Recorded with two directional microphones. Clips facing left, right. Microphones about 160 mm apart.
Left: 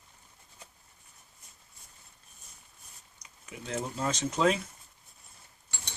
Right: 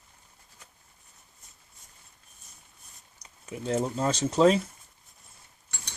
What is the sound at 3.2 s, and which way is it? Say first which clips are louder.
Speech: right 9 dB; 30° right (ahead or behind).